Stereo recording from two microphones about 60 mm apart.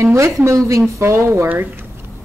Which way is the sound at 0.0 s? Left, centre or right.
Right.